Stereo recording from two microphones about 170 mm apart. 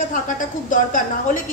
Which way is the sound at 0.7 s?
50° left (ahead or behind).